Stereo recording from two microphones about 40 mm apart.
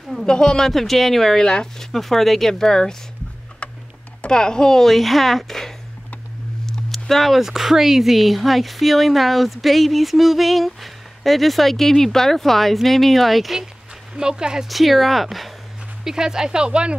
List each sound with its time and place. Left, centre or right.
0.3 s speech: centre
1.4 s speech: centre
1.9 s speech: centre
4.3 s speech: centre
14.1 s speech: right
14.7 s speech: centre
16.0 s speech: centre